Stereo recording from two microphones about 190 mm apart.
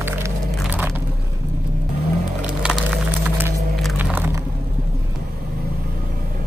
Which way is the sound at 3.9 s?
10° right (ahead or behind).